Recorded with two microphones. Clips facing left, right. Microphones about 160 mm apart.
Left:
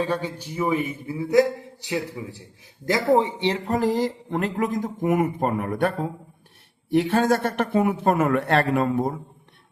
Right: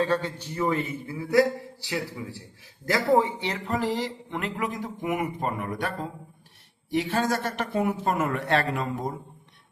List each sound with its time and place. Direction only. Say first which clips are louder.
0.0 s a man's voice: even; 10° left (ahead or behind)
3.7 s speech: left 3 dB; 40° left (ahead or behind)